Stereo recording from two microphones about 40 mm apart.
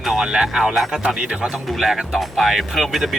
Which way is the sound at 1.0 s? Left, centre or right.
Right.